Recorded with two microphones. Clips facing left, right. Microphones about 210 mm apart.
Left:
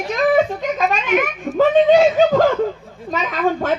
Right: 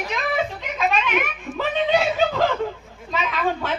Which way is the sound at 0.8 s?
45° left (ahead or behind).